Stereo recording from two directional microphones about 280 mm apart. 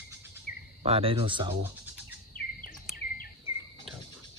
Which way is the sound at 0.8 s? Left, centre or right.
Right.